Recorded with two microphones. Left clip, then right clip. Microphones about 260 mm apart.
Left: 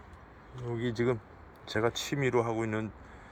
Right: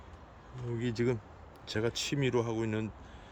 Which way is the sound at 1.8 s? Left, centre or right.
Centre.